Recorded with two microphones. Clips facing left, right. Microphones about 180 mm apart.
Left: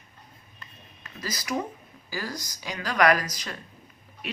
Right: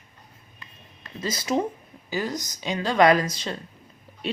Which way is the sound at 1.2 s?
25° right (ahead or behind).